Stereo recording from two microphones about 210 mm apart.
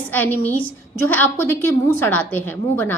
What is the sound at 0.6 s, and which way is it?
Speech, 70° left (ahead or behind).